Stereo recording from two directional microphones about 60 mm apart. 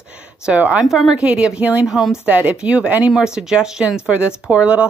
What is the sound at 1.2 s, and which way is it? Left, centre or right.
Speech, centre.